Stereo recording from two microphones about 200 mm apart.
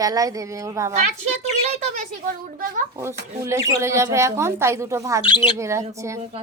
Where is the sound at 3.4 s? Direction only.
15° right (ahead or behind).